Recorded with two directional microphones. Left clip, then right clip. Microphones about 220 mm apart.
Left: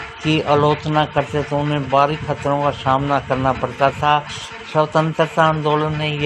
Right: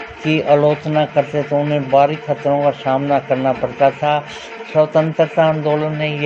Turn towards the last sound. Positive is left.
turn(degrees=50)  # may be behind; listen again after turning